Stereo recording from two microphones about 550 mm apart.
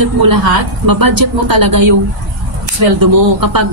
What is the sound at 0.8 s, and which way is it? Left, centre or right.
Speech, right.